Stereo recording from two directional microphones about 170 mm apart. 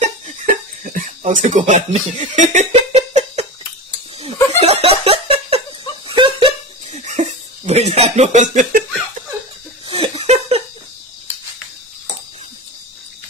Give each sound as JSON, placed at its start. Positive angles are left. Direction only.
{"t": 0.0, "sound": "music", "side_deg": -50}
{"t": 4.2, "sound": "laughter", "side_deg": -35}
{"t": 9.8, "sound": "laughter", "side_deg": -35}